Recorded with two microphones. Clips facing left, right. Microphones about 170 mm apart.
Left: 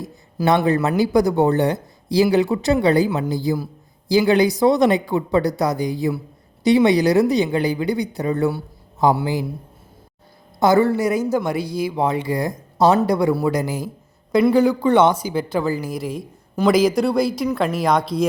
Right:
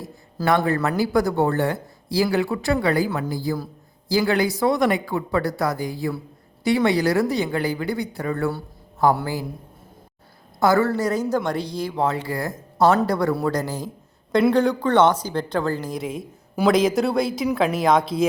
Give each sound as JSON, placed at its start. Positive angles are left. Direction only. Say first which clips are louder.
{"t": 0.0, "sound": "speech", "louder": "left 4 dB", "side_deg": 20}
{"t": 10.6, "sound": "speech", "louder": "left 3 dB", "side_deg": 15}